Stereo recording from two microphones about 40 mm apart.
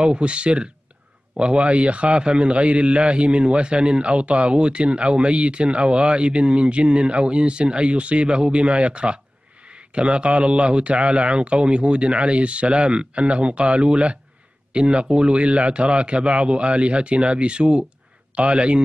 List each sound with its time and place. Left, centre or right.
0.0 s a man's voice: right